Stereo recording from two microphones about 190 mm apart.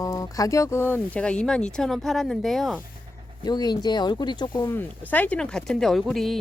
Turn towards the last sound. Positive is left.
turn(degrees=0)  # may be behind; listen again after turning